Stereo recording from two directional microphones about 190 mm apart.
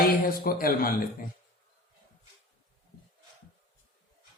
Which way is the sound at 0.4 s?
50° left (ahead or behind).